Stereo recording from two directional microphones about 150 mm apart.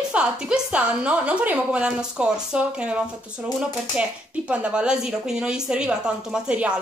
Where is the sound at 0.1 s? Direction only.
5° right (ahead or behind).